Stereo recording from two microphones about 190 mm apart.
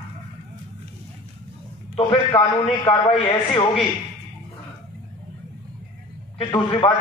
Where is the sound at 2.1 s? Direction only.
25° left (ahead or behind).